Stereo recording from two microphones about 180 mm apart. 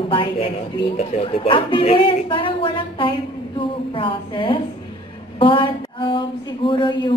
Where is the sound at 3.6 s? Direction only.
30° left (ahead or behind).